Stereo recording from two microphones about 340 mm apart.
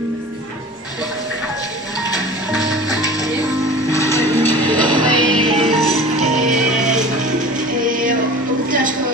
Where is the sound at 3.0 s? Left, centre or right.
Centre.